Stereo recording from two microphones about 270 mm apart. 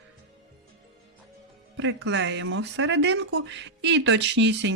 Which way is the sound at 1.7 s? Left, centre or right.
Right.